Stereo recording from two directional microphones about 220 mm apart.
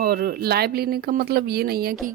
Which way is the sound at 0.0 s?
45° right (ahead or behind).